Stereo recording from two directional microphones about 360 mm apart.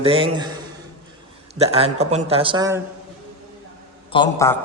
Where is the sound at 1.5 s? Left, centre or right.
Centre.